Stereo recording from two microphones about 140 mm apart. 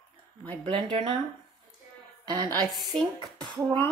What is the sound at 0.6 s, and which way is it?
Speech, 40° right (ahead or behind).